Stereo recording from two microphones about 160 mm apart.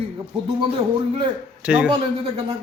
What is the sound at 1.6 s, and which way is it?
Speech, 10° right (ahead or behind).